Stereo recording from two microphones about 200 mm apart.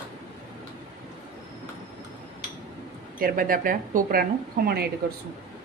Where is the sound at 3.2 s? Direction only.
45° right (ahead or behind).